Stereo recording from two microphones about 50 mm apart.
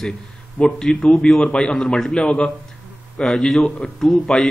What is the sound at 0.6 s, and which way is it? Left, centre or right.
Speech, left.